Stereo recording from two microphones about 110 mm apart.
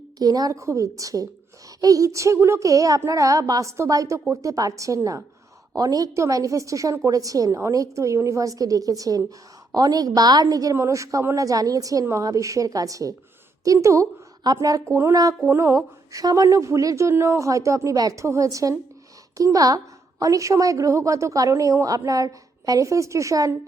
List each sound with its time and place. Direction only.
0.2 s a woman's voice: 35° right (ahead or behind)